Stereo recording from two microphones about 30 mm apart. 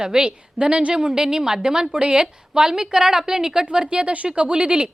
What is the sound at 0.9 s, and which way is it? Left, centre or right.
A woman's voice, right.